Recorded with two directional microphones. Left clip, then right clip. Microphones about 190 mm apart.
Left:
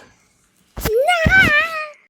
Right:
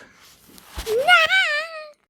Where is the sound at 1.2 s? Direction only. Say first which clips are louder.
Left 6 dB; 25° right (ahead or behind).